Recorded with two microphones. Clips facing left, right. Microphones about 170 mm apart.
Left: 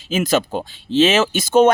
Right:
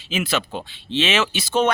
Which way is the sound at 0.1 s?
40° left (ahead or behind).